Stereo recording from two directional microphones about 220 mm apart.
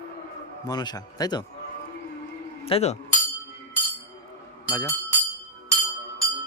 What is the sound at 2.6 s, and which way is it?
Speech, 25° left (ahead or behind).